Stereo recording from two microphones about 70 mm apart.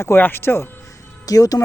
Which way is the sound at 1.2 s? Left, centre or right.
Left.